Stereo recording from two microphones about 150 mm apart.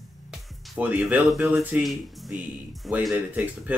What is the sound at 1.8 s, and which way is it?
Speech, centre (ahead or behind).